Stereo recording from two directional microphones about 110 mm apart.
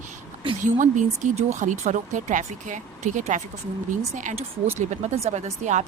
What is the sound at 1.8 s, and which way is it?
Speech, 90° right.